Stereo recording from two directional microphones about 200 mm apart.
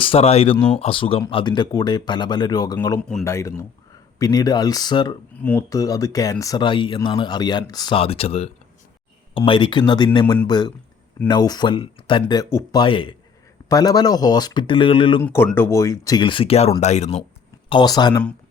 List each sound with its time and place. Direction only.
0.0 s speech: 30° left (ahead or behind)
0.5 s speech: 10° left (ahead or behind)
0.8 s speech: 25° left (ahead or behind)
5.4 s speech: 10° left (ahead or behind); by 15.2 s 25° left (ahead or behind)
15.2 s speech: 10° left (ahead or behind); by 17.2 s 35° left (ahead or behind)
17.7 s speech: 20° left (ahead or behind)